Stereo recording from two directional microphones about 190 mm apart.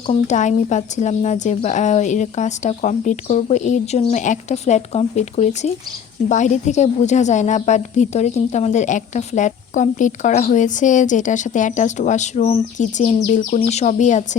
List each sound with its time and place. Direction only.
0.1 s a woman's voice: 40° left (ahead or behind)